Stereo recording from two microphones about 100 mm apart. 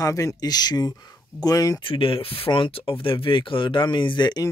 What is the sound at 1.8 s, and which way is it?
Speech, 60° left (ahead or behind).